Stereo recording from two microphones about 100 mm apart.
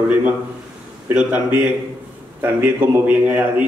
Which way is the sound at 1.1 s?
15° right (ahead or behind).